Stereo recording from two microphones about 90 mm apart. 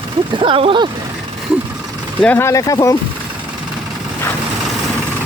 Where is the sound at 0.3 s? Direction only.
80° right.